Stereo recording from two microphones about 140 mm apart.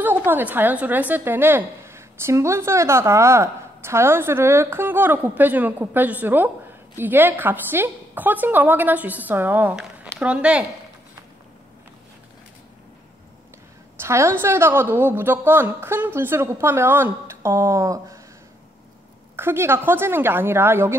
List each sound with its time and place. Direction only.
0.0 s a woman's voice: 15° right (ahead or behind)
13.9 s a woman's voice: 20° right (ahead or behind)
19.3 s a woman's voice: 15° right (ahead or behind)